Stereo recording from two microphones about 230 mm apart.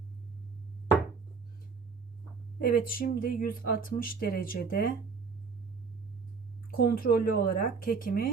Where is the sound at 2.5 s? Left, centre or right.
Left.